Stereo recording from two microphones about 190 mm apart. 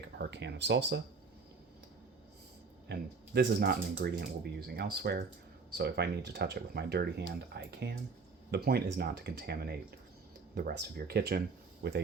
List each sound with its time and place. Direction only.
0.2 s speech: 65° right (ahead or behind)
2.9 s speech: 60° right (ahead or behind)